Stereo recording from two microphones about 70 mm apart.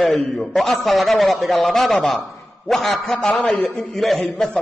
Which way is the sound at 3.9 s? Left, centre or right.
Centre.